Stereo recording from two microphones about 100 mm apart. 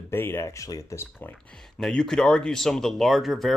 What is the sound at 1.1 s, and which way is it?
Speech, 15° left (ahead or behind).